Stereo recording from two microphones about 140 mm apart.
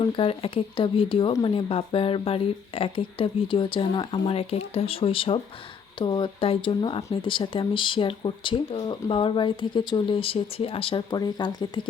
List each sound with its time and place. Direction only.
0.0 s speech: 40° left (ahead or behind)